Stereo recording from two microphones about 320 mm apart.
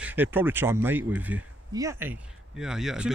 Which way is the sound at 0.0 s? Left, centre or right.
Centre.